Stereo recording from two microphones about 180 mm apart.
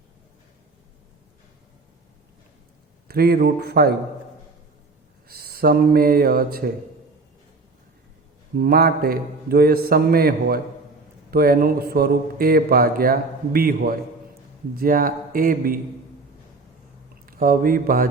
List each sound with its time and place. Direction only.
3.1 s a man's voice: 60° right (ahead or behind)
5.3 s speech: 60° right (ahead or behind)
8.5 s a man's voice: 55° right (ahead or behind)
17.2 s speech: 50° right (ahead or behind)